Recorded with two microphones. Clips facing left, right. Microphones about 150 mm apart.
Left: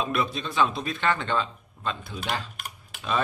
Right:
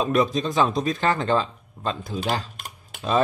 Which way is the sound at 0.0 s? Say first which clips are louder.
Right 7 dB; 40° right (ahead or behind).